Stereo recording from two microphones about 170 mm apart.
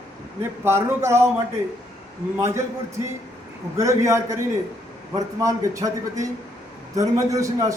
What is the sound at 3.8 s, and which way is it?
A man's voice, 15° right (ahead or behind).